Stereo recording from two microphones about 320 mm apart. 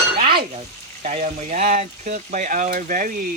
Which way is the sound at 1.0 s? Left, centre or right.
Right.